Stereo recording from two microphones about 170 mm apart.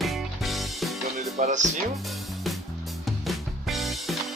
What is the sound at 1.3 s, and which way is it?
Speech, 40° right (ahead or behind).